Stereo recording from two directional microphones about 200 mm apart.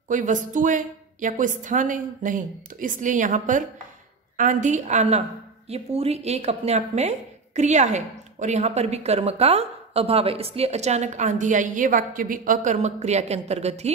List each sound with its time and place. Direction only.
0.1 s speech: 40° right (ahead or behind)